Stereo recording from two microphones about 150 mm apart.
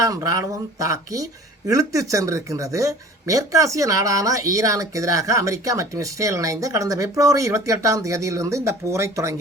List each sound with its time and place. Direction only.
0.0 s speech: 20° right (ahead or behind)